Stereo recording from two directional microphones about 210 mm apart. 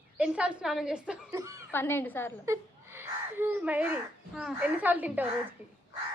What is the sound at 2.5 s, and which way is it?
Speech, 10° right (ahead or behind).